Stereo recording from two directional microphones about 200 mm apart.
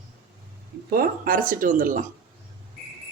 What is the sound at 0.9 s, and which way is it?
Speech, 45° right (ahead or behind).